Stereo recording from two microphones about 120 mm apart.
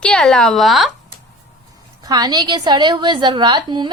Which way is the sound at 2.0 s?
35° right (ahead or behind).